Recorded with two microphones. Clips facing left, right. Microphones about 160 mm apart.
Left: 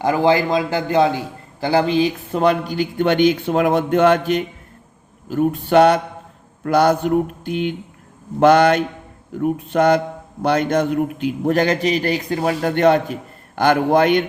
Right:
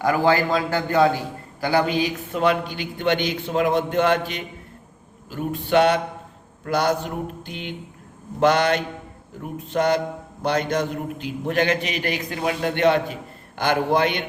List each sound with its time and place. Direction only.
0.0 s a man's voice: 20° left (ahead or behind); by 6.0 s 40° left (ahead or behind)
6.7 s a man's voice: 50° left (ahead or behind)
9.4 s a sound: 60° left (ahead or behind)
10.4 s a man's voice: 55° left (ahead or behind)